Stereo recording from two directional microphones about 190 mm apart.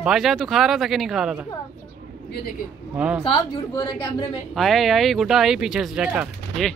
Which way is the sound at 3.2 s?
25° left (ahead or behind).